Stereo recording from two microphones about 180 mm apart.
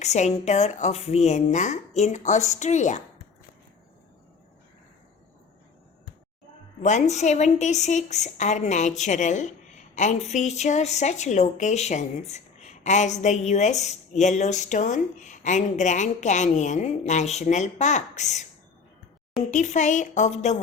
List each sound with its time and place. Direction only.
0.0 s a woman's voice: 40° left (ahead or behind)
6.8 s a woman's voice: 40° left (ahead or behind)
19.5 s a woman's voice: 40° left (ahead or behind)